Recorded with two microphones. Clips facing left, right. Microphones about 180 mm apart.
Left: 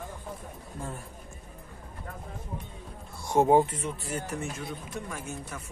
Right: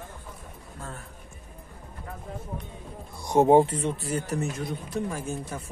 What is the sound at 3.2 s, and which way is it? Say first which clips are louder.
Speech: right 3 dB; 20° right (ahead or behind).